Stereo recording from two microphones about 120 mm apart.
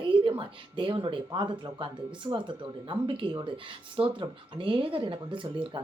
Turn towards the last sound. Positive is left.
turn(degrees=-45)  # may be behind; listen again after turning